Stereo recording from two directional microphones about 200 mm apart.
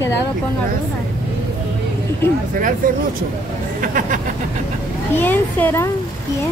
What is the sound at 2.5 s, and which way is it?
Music, 40° right (ahead or behind).